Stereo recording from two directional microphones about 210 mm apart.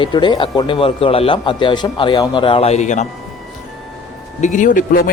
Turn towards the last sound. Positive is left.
turn(degrees=40)  # may be behind; listen again after turning